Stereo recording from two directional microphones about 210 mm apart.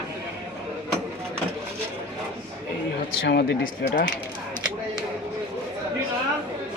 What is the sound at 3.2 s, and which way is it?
Speech, 55° left (ahead or behind).